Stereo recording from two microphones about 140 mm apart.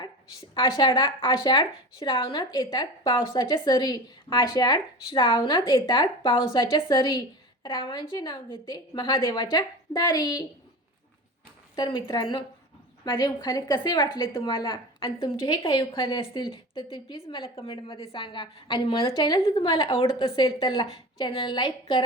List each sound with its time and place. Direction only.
0.8 s a woman's voice: 35° left (ahead or behind)
11.8 s a woman's voice: 30° left (ahead or behind)